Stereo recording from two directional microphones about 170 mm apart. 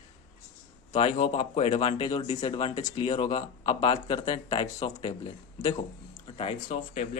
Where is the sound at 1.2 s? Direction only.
35° left (ahead or behind).